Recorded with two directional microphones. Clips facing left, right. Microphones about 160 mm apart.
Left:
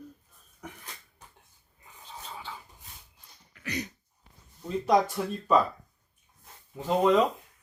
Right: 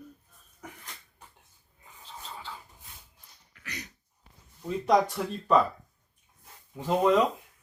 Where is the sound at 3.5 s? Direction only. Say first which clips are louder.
Left 9 dB; 20° left (ahead or behind).